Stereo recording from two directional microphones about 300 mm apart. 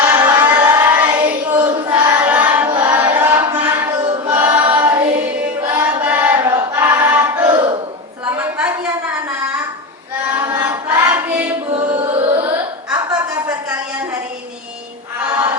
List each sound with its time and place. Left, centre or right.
0.0 s child singing: centre
2.6 s choir: centre
4.7 s singing: centre
5.7 s choir: centre
8.2 s a sound: centre
10.3 s choir: centre
11.9 s music: centre
12.9 s a sound: centre